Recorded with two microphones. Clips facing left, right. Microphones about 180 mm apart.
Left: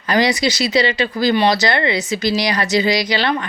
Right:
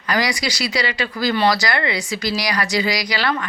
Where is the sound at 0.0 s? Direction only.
25° left (ahead or behind).